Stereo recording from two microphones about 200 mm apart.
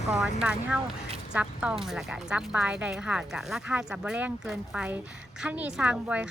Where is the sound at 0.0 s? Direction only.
Centre (ahead or behind).